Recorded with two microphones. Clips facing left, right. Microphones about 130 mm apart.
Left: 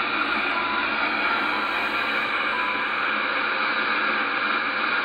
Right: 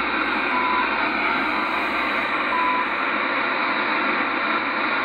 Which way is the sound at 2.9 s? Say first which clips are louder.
Right 3 dB; 50° right (ahead or behind).